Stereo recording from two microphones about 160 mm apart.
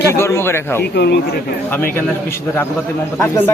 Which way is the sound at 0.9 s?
90° left.